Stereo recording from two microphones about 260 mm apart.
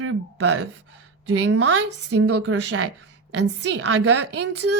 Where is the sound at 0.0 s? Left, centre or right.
Right.